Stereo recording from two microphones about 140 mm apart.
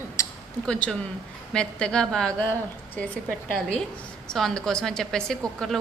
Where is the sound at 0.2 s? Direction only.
20° left (ahead or behind).